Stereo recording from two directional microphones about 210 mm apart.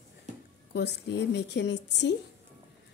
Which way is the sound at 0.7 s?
55° left (ahead or behind).